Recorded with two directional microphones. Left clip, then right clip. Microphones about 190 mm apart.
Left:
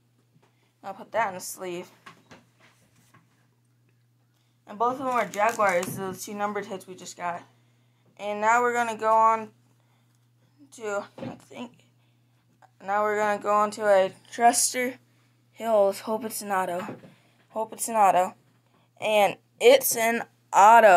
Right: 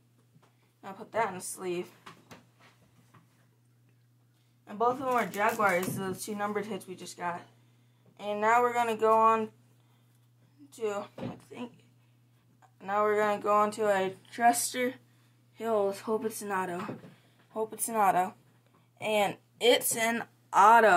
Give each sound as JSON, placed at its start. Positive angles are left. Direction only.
{"t": 0.7, "sound": "speech", "side_deg": 30}
{"t": 4.6, "sound": "speech", "side_deg": 35}
{"t": 10.7, "sound": "a sound", "side_deg": 30}
{"t": 12.5, "sound": "a woman's voice", "side_deg": 25}